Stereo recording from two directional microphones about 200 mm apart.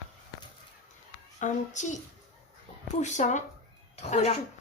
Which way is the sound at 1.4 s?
35° left (ahead or behind).